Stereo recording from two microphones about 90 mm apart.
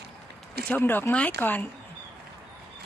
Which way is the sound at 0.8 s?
25° left (ahead or behind).